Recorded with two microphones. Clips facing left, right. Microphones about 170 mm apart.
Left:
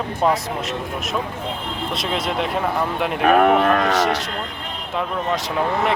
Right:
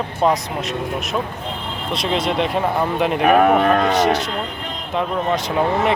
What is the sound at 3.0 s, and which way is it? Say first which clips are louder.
Speech: right 1 dB; centre (ahead or behind).